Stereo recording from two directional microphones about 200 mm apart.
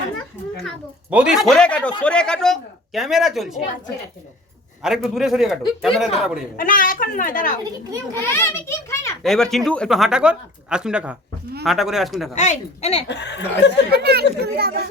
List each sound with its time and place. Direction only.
1.1 s a man's voice: 5° right (ahead or behind)
4.8 s a man's voice: centre (ahead or behind)
6.6 s a woman's voice: 45° left (ahead or behind)
8.1 s a child's voice: 15° left (ahead or behind)
9.2 s a man's voice: centre (ahead or behind)
12.3 s speech: 35° left (ahead or behind)
13.1 s speech: 60° left (ahead or behind)
13.9 s speech: 50° right (ahead or behind)